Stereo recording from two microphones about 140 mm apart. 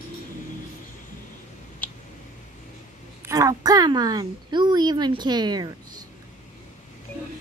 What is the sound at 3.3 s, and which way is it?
Speech, 25° right (ahead or behind).